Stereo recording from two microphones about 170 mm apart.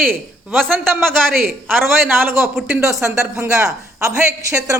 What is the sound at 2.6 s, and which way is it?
Speech, 5° right (ahead or behind).